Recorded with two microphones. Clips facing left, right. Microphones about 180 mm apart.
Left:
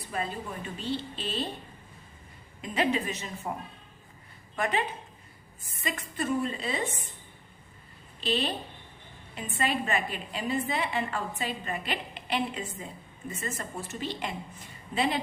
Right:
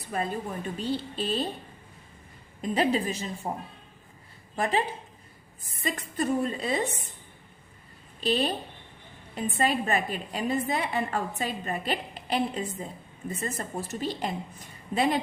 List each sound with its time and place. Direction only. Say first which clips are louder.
0.1 s a woman's voice: right 4 dB; 45° right (ahead or behind)
2.6 s a woman's voice: right 3 dB; 35° right (ahead or behind)
5.9 s a woman's voice: right 2 dB; 40° right (ahead or behind)
8.2 s a woman's voice: right 3 dB; 40° right (ahead or behind)